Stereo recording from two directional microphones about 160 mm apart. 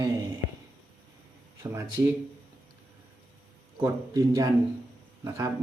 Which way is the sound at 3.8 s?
20° right (ahead or behind).